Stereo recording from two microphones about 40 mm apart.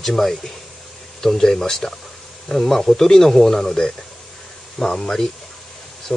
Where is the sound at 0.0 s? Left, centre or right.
Centre.